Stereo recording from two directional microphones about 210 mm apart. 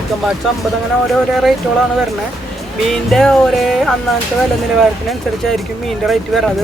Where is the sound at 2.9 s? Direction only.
Centre (ahead or behind).